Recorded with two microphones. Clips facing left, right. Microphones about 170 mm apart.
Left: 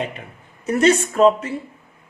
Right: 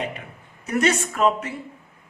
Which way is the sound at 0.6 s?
30° left (ahead or behind).